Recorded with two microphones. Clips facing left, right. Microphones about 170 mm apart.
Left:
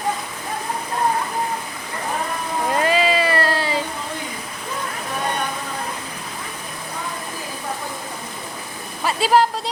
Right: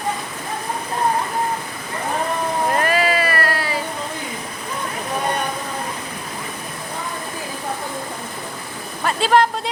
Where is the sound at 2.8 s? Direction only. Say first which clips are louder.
Left 1 dB; 20° left (ahead or behind).